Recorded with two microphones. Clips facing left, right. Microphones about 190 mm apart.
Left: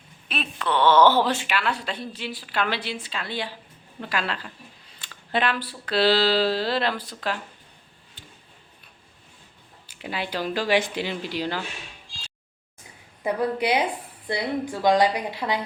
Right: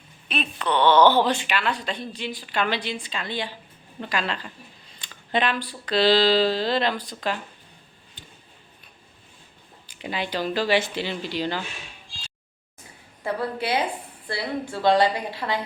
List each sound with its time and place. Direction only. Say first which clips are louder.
0.3 s a woman's voice: right 1 dB; centre (ahead or behind)
9.9 s speech: right 1 dB; 5° left (ahead or behind)
13.2 s speech: left 3 dB; 15° left (ahead or behind)